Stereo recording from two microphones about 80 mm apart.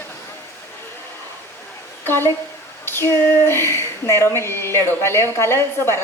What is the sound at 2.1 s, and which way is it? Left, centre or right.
A woman's voice, left.